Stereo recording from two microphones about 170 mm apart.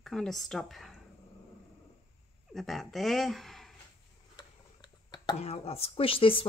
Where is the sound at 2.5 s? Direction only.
Centre (ahead or behind).